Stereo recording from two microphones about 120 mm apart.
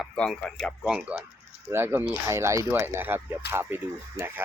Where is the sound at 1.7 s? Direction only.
15° right (ahead or behind).